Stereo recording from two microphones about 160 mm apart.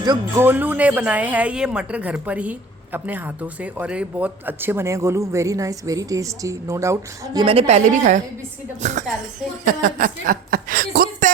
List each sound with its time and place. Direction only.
0.0 s speech: 25° right (ahead or behind)
0.4 s a woman's voice: 10° right (ahead or behind)
7.4 s a woman's voice: 40° right (ahead or behind)
9.6 s a woman's voice: 60° right (ahead or behind)